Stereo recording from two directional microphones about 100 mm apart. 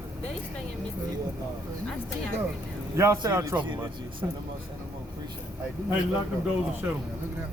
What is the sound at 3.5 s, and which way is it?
Speech, 50° right (ahead or behind).